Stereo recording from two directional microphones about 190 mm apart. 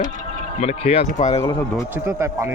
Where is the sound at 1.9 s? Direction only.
15° right (ahead or behind).